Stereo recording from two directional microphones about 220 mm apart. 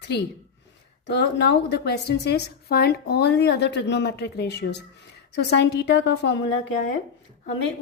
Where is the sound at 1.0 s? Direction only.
50° left (ahead or behind).